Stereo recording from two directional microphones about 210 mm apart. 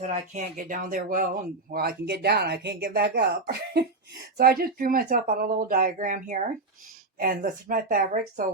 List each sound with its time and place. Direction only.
0.1 s speech: 35° right (ahead or behind)